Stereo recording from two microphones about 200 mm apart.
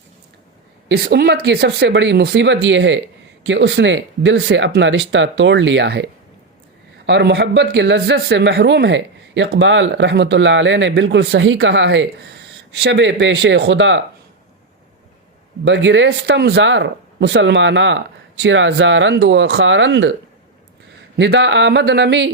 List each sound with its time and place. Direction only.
0.9 s speech: 55° right (ahead or behind)
15.6 s speech: 65° right (ahead or behind)
21.2 s speech: 60° right (ahead or behind)